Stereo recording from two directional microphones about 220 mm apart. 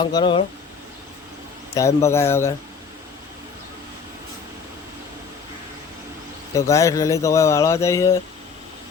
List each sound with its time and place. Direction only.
0.0 s speech: 20° left (ahead or behind)
1.7 s speech: 15° left (ahead or behind)
6.5 s speech: 15° left (ahead or behind)